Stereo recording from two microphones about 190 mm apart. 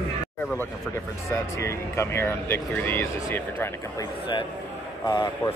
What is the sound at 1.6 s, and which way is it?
Speech, 15° left (ahead or behind).